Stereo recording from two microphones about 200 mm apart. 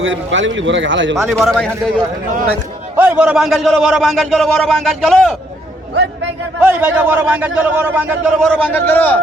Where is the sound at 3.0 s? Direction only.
10° right (ahead or behind).